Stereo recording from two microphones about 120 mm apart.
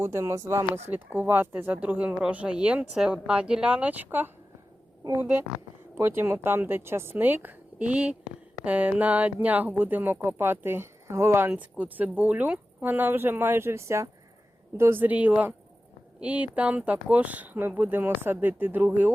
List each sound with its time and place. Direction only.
0.0 s speech: 20° right (ahead or behind)